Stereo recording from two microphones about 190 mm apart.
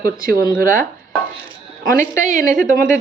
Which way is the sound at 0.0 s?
50° right (ahead or behind).